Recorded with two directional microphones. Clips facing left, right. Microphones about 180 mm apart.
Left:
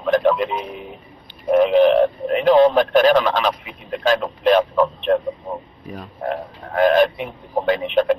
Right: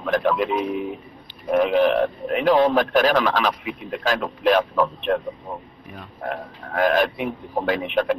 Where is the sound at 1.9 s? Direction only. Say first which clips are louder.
Left 5 dB; 35° left (ahead or behind).